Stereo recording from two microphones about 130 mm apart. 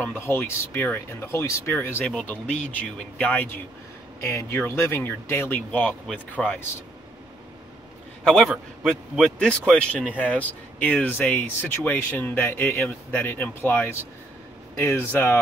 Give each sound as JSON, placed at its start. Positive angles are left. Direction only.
{"t": 0.2, "sound": "a man's voice", "side_deg": 20}
{"t": 8.2, "sound": "a man's voice", "side_deg": 0}